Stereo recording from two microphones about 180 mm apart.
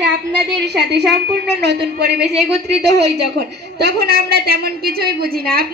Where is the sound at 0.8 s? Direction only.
70° right (ahead or behind).